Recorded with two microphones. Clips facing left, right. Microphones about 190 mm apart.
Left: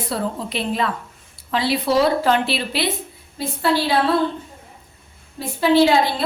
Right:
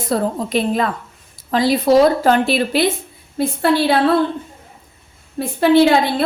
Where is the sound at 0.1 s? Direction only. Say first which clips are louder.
Right 8 dB; 45° right (ahead or behind).